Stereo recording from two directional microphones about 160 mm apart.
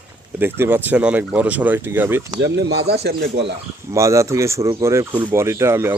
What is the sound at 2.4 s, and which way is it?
Speech, 90° right.